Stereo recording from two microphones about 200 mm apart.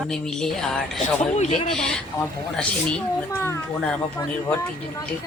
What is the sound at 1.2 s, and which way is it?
Speech, 35° left (ahead or behind).